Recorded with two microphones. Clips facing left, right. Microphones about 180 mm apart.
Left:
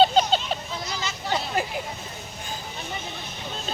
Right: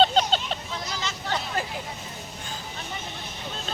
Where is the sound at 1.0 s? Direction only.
10° left (ahead or behind).